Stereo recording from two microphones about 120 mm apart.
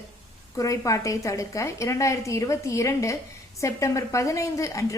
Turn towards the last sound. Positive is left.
turn(degrees=25)  # may be behind; listen again after turning